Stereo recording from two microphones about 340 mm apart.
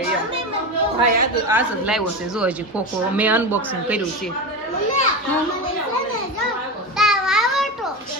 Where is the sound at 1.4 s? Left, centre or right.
Centre.